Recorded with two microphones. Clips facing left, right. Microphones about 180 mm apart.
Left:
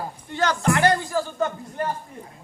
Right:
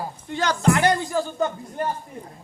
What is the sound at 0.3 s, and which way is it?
A man's voice, 15° right (ahead or behind).